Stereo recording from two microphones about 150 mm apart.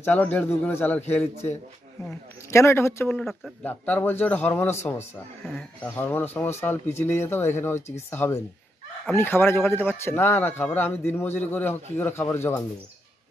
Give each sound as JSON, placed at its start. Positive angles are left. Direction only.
{"t": 0.0, "sound": "speech", "side_deg": 10}
{"t": 3.2, "sound": "speech", "side_deg": 0}
{"t": 3.6, "sound": "speech", "side_deg": 10}
{"t": 5.4, "sound": "speech", "side_deg": 0}